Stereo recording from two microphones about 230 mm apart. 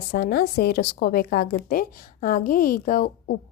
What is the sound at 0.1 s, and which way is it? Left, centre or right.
A woman's voice, left.